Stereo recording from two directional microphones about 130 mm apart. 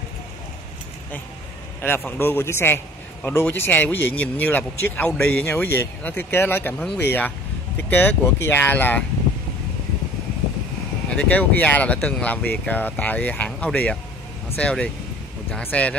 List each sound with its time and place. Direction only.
1.8 s a man's voice: 15° left (ahead or behind)
11.1 s a man's voice: 10° left (ahead or behind)